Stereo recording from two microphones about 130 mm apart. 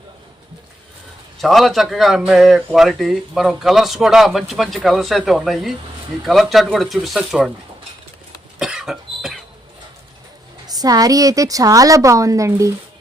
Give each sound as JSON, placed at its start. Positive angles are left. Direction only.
{"t": 1.4, "sound": "speech", "side_deg": 0}
{"t": 8.5, "sound": "cough", "side_deg": -5}
{"t": 10.7, "sound": "a woman's voice", "side_deg": -30}